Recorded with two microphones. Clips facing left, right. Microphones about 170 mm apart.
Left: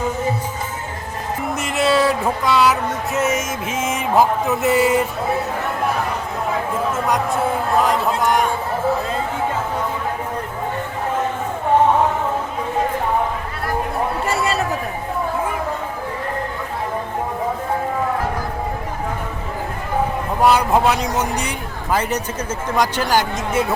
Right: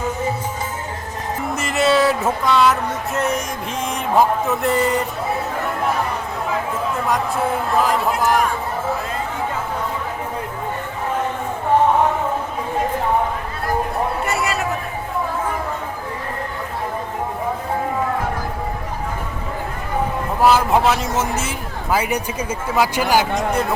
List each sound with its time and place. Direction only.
1.5 s music: centre (ahead or behind)
7.8 s speech: centre (ahead or behind)
14.3 s a sound: 30° left (ahead or behind)
20.4 s speech: centre (ahead or behind)
23.4 s speech: centre (ahead or behind)